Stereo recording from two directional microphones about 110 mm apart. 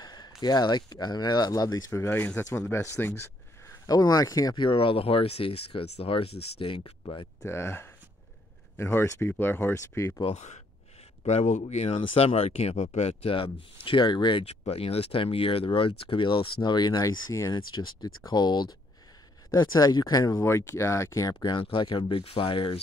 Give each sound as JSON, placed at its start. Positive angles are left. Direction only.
{"t": 0.0, "sound": "speech", "side_deg": 40}
{"t": 3.8, "sound": "speech", "side_deg": 35}
{"t": 4.6, "sound": "speech", "side_deg": 55}
{"t": 7.4, "sound": "speech", "side_deg": 25}
{"t": 10.2, "sound": "speech", "side_deg": 90}
{"t": 12.1, "sound": "speech", "side_deg": 65}
{"t": 14.4, "sound": "speech", "side_deg": 70}
{"t": 21.4, "sound": "speech", "side_deg": 45}